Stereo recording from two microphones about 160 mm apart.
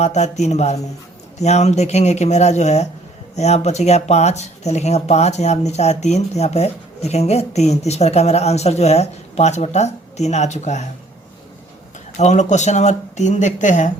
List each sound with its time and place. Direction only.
0.0 s speech: 45° left (ahead or behind)
12.1 s speech: 45° left (ahead or behind)